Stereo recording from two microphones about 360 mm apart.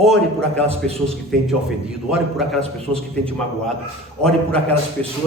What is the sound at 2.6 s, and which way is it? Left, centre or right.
Speech, centre.